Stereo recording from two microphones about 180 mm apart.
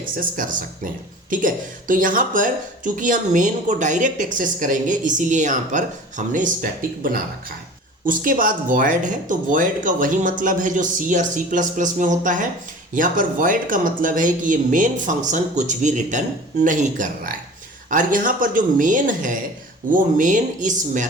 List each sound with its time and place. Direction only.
0.2 s a woman's voice: 50° right (ahead or behind)